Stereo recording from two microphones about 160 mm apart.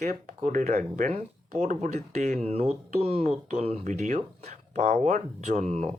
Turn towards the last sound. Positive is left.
turn(degrees=-45)  # may be behind; listen again after turning